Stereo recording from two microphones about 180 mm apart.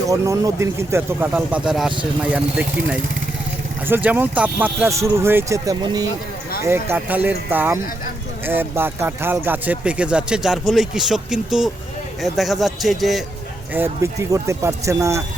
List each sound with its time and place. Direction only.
0.1 s speech: 15° right (ahead or behind)
3.8 s a man's voice: 10° right (ahead or behind)
13.7 s speech: 15° right (ahead or behind)